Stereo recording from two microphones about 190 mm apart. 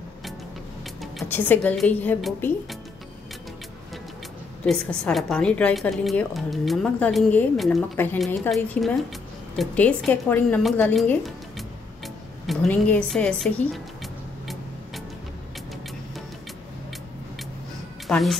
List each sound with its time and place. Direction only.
1.3 s speech: 10° left (ahead or behind)
4.6 s a woman's voice: 5° left (ahead or behind)
7.9 s a woman's voice: 10° left (ahead or behind)
18.0 s a woman's voice: centre (ahead or behind)